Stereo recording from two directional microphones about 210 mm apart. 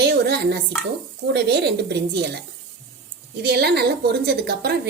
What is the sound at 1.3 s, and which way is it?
A woman's voice, 50° right (ahead or behind).